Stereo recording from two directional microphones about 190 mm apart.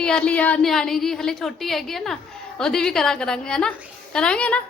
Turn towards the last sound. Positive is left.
turn(degrees=5)  # may be behind; listen again after turning